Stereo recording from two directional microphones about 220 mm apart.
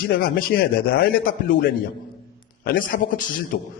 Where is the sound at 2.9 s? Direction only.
50° left (ahead or behind).